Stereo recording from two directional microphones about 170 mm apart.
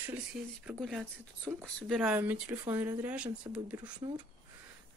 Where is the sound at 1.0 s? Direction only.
15° right (ahead or behind).